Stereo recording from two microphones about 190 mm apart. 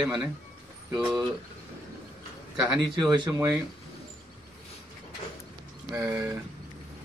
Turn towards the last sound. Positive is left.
turn(degrees=-15)  # may be behind; listen again after turning